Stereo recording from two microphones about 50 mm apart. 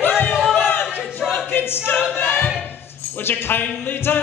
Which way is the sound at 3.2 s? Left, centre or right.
Left.